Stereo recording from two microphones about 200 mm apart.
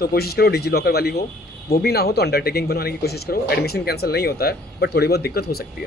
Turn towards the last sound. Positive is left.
turn(degrees=50)  # may be behind; listen again after turning